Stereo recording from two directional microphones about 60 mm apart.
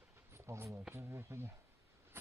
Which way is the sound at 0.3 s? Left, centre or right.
Right.